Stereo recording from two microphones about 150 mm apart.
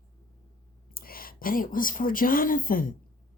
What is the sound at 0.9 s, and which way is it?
A woman's voice, 75° left (ahead or behind).